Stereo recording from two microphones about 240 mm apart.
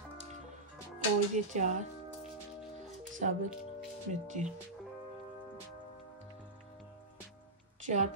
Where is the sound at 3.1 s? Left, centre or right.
Right.